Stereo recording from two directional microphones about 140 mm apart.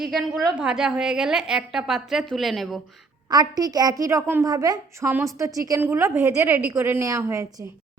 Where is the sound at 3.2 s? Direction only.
30° right (ahead or behind).